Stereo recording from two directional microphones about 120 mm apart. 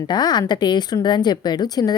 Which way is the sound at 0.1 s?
35° left (ahead or behind).